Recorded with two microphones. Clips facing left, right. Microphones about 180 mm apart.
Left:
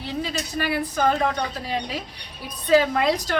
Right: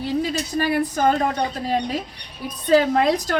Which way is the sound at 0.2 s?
40° right (ahead or behind).